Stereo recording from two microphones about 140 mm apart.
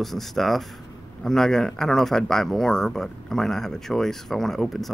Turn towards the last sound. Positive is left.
turn(degrees=0)  # may be behind; listen again after turning